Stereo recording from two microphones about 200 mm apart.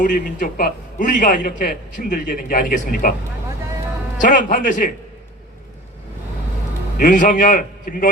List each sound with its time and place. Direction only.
0.0 s a man's voice: 40° left (ahead or behind)
4.2 s a man's voice: 40° left (ahead or behind)
7.0 s a man's voice: 40° left (ahead or behind)